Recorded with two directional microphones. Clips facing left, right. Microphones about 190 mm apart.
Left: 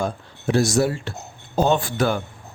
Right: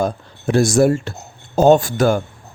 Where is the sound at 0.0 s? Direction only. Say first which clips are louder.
Right 5 dB; 50° right (ahead or behind).